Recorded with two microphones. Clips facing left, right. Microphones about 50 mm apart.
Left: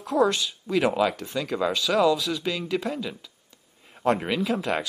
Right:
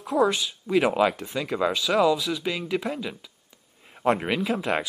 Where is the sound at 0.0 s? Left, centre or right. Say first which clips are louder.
Even; centre.